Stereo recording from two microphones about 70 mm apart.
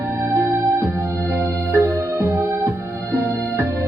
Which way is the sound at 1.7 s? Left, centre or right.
Right.